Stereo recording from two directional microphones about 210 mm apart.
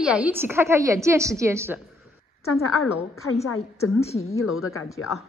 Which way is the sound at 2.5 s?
90° left.